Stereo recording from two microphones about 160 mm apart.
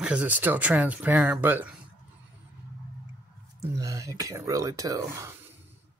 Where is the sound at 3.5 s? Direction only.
20° right (ahead or behind).